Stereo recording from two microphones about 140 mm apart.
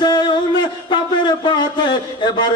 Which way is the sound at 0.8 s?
35° left (ahead or behind).